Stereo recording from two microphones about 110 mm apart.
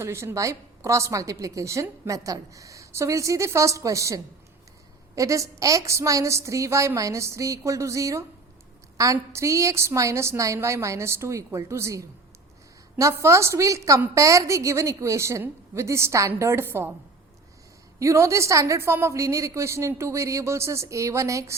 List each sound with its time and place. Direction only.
0.0 s a woman's voice: 25° right (ahead or behind)
18.0 s a woman's voice: 30° right (ahead or behind)